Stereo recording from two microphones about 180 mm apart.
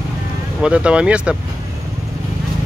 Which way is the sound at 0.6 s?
5° right (ahead or behind).